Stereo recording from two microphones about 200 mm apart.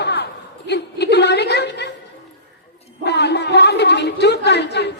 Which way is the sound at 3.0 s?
60° left (ahead or behind).